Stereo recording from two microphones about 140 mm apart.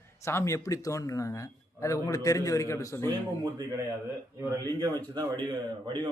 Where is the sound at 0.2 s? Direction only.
20° left (ahead or behind).